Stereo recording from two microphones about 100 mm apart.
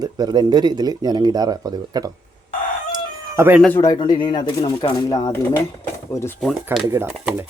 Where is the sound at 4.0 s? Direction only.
50° left (ahead or behind).